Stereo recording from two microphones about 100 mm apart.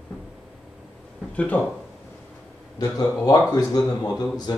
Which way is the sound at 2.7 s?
40° left (ahead or behind).